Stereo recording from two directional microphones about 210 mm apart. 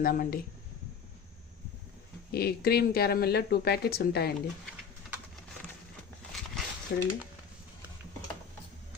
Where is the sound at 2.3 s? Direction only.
50° left (ahead or behind).